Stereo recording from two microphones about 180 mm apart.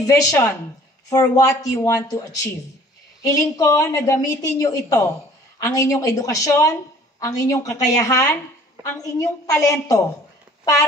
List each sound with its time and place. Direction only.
0.0 s a woman's voice: 20° left (ahead or behind)